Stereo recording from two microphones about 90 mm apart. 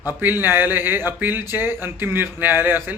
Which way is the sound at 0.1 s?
20° right (ahead or behind).